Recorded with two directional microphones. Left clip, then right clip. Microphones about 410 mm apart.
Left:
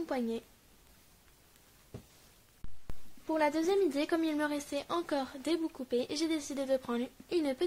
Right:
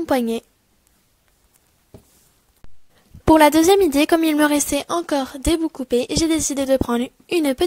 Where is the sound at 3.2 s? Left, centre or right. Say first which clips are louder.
Right 18 dB; right.